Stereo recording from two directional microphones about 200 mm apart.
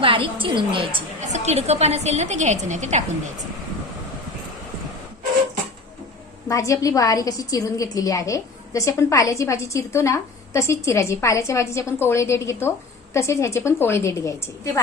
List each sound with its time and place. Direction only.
0.0 s a woman's voice: 25° right (ahead or behind)
6.5 s a woman's voice: 15° left (ahead or behind)